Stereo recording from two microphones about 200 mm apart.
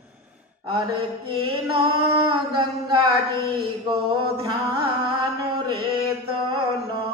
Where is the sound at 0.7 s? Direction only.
25° right (ahead or behind).